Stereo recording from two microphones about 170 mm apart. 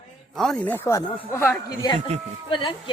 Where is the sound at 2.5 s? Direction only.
30° left (ahead or behind).